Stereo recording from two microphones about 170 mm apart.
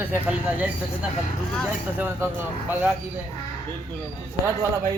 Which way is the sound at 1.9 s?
10° right (ahead or behind).